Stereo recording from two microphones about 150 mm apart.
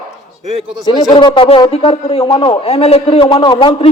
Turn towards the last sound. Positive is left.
turn(degrees=35)  # may be behind; listen again after turning